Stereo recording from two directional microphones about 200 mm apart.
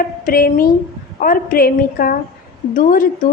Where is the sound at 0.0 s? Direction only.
45° left (ahead or behind).